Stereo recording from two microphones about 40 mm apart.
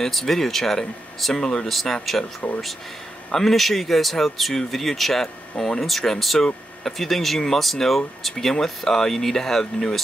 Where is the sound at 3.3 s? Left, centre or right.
Centre.